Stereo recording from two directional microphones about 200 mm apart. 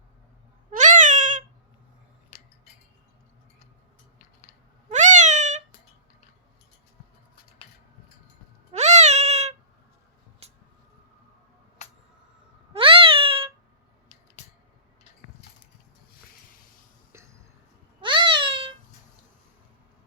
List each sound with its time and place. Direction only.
0.7 s cat: 40° right (ahead or behind)
4.9 s cat: 35° right (ahead or behind)
8.7 s cat: 35° right (ahead or behind)
10.4 s a sound: 30° right (ahead or behind)
12.7 s meow: 25° right (ahead or behind)
18.0 s cat: 25° right (ahead or behind)